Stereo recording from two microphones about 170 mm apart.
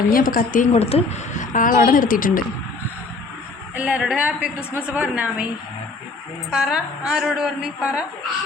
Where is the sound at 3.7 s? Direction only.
5° right (ahead or behind).